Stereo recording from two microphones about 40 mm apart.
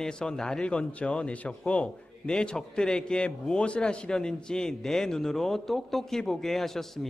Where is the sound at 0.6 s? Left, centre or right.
Left.